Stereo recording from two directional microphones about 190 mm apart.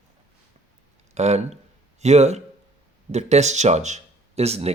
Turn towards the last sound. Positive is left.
turn(degrees=-35)  # may be behind; listen again after turning